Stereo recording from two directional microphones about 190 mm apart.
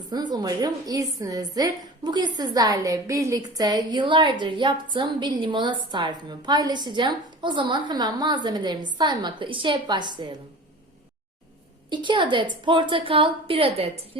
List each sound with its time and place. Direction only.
0.1 s a woman's voice: 20° right (ahead or behind)
11.9 s a woman's voice: 25° right (ahead or behind)